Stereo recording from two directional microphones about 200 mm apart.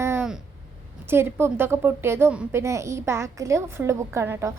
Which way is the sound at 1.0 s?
10° right (ahead or behind).